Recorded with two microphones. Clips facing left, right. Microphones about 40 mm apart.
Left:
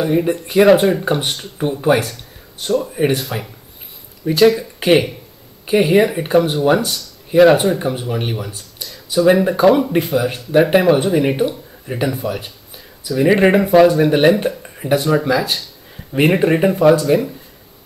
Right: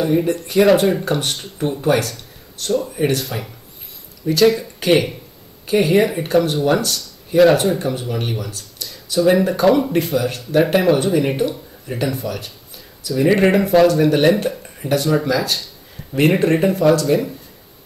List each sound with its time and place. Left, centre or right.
0.0 s speech: centre
4.7 s a sound: centre
5.7 s speech: centre